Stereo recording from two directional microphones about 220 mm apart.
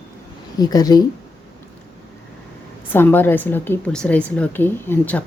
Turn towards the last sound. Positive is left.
turn(degrees=10)  # may be behind; listen again after turning